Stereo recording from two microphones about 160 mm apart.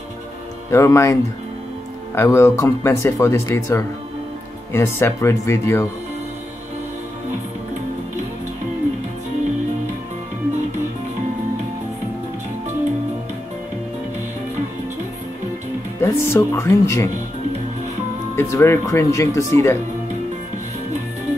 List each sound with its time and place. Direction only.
0.7 s speech: 15° left (ahead or behind)
2.1 s speech: 15° left (ahead or behind)
16.0 s speech: 15° left (ahead or behind)
18.3 s speech: 15° left (ahead or behind)